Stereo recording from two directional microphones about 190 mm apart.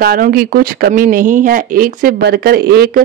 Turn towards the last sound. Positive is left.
turn(degrees=-55)  # may be behind; listen again after turning